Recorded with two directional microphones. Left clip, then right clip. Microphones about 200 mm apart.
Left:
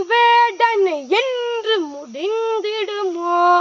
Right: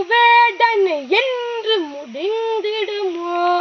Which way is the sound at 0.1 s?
5° left (ahead or behind).